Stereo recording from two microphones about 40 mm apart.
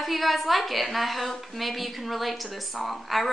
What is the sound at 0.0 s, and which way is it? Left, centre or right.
A woman's voice, centre.